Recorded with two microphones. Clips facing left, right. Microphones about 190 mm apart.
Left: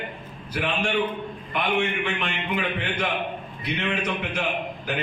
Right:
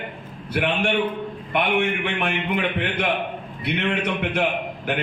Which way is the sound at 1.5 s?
60° right (ahead or behind).